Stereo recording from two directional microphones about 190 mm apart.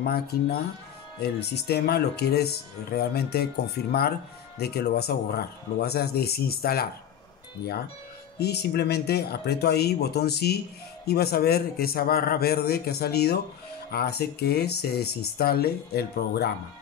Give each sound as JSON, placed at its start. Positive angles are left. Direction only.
{"t": 0.0, "sound": "speech", "side_deg": 55}
{"t": 8.4, "sound": "speech", "side_deg": 60}